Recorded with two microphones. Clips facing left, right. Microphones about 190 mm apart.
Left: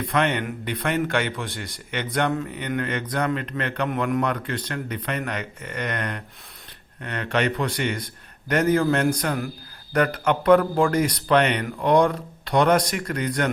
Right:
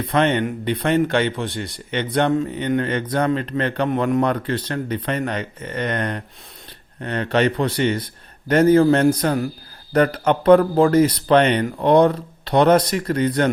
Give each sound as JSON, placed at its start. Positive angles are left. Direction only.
{"t": 0.0, "sound": "a man's voice", "side_deg": -30}